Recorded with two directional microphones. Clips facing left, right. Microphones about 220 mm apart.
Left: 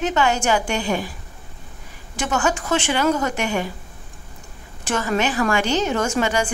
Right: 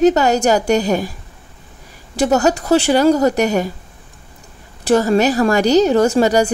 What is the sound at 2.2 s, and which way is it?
A woman's voice, 35° right (ahead or behind).